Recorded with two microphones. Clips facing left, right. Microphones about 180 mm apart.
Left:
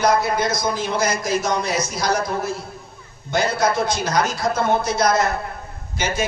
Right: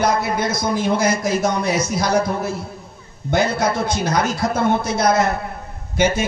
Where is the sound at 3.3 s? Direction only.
55° right (ahead or behind).